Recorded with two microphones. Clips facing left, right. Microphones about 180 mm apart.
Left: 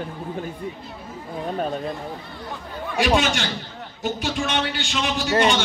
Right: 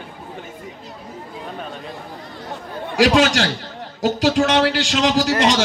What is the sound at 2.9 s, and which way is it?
A man's voice, 90° right.